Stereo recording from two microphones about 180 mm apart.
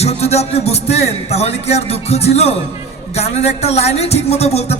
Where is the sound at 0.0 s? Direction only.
35° left (ahead or behind).